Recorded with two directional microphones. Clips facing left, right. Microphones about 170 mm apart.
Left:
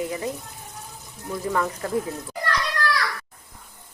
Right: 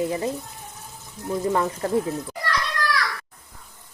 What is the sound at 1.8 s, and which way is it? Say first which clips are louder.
Speech: right 3 dB; 35° right (ahead or behind).